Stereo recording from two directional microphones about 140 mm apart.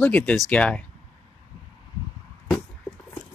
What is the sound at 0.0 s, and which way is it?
Speech, 10° left (ahead or behind).